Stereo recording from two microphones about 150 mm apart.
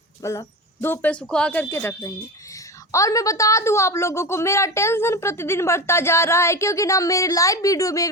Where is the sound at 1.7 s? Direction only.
15° left (ahead or behind).